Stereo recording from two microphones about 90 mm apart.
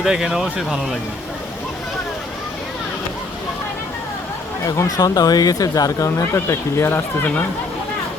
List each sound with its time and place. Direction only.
0.0 s speech: 5° right (ahead or behind)
4.6 s speech: 45° left (ahead or behind)